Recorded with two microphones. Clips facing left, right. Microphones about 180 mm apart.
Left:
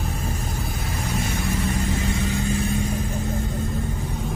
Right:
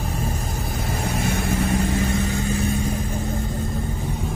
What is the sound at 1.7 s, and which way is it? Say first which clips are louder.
Vehicle: right 4 dB; 55° right (ahead or behind).